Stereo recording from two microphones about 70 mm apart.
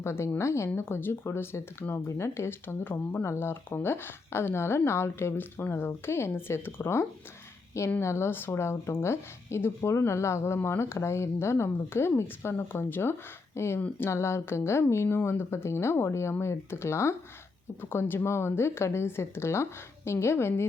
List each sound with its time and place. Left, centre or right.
0.0 s speech: left